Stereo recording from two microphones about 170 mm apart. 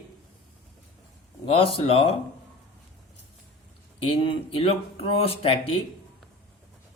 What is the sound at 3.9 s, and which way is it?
Speech, 35° left (ahead or behind).